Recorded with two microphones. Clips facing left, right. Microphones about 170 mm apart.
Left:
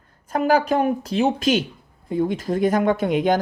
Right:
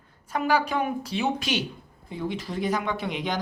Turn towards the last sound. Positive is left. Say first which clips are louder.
# left 10 dB
turn(degrees=50)  # may be behind; listen again after turning